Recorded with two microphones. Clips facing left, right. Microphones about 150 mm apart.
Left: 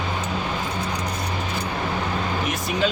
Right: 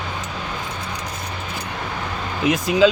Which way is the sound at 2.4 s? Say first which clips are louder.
Right 12 dB; 90° right.